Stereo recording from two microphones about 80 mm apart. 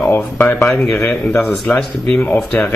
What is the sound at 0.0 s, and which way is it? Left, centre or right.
Speech, left.